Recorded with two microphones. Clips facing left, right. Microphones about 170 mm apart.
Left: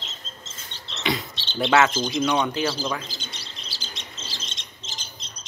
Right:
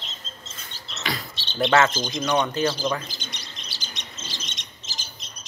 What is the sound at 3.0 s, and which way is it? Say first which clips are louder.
Chirp: even; 30° left (ahead or behind).